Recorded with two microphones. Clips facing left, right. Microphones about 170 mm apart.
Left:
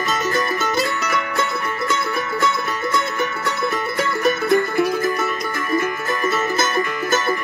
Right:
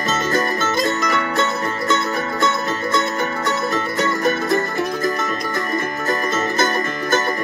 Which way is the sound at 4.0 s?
40° right (ahead or behind).